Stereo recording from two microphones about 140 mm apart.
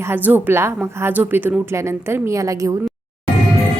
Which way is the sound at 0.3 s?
15° right (ahead or behind).